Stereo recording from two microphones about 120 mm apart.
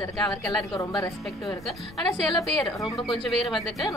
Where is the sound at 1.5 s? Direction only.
Centre (ahead or behind).